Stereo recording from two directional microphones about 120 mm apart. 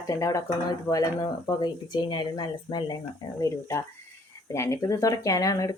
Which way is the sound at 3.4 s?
25° left (ahead or behind).